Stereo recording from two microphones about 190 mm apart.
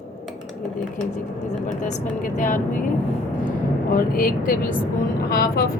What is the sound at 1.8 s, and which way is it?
Speech, 40° left (ahead or behind).